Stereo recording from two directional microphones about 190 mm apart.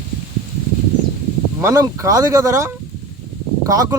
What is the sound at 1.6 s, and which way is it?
Speech, 15° right (ahead or behind).